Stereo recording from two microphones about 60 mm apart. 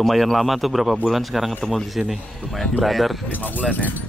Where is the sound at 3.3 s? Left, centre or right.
Left.